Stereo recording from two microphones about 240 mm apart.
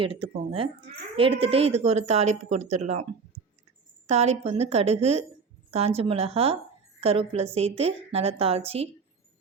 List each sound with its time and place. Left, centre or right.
0.0 s speech: right